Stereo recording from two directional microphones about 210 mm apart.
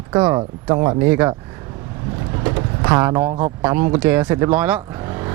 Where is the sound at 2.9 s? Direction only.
20° right (ahead or behind).